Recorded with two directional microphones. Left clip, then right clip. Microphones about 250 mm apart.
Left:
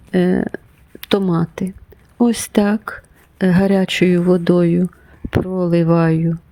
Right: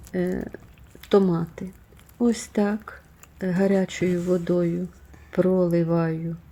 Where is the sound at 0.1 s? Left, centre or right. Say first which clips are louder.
Left 10 dB; left.